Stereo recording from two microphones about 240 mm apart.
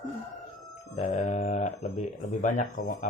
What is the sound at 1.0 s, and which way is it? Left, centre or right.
Speech, left.